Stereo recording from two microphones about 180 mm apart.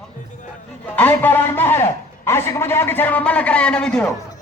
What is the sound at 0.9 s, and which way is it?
A man's voice, 10° left (ahead or behind).